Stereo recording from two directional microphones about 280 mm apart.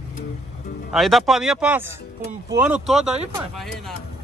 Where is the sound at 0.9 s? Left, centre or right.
Centre.